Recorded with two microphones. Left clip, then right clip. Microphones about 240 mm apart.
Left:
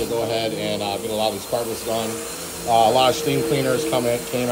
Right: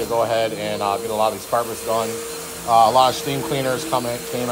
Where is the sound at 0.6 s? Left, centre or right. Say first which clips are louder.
Right 2 dB; right.